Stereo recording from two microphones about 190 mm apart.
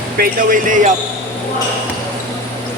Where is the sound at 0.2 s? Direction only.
45° right (ahead or behind).